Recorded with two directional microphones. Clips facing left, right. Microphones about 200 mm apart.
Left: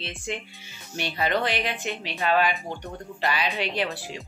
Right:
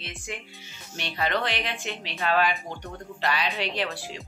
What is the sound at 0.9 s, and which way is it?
Speech, 5° left (ahead or behind).